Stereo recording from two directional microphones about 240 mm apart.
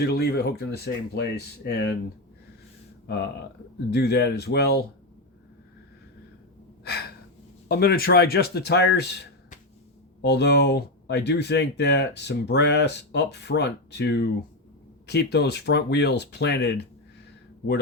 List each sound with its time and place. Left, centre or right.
0.0 s speech: left
3.1 s speech: left
6.8 s gasp: left
7.7 s speech: left